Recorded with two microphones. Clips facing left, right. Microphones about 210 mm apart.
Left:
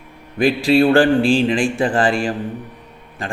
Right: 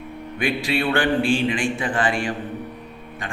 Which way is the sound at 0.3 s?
35° left (ahead or behind).